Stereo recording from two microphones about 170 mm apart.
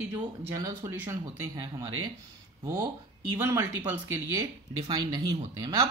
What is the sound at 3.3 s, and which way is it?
Speech, 10° right (ahead or behind).